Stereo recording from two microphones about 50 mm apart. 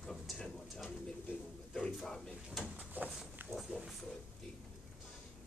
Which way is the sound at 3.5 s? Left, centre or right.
Centre.